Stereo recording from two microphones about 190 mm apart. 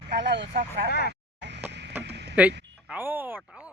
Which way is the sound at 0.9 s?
55° left (ahead or behind).